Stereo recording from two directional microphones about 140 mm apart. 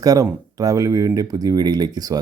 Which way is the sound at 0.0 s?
25° right (ahead or behind).